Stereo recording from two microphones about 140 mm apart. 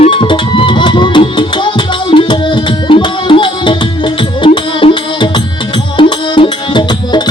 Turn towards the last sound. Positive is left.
turn(degrees=35)  # may be behind; listen again after turning